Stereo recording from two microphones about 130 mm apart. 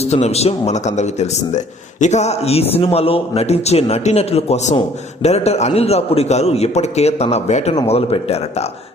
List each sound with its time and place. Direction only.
0.0 s a man's voice: 55° left (ahead or behind)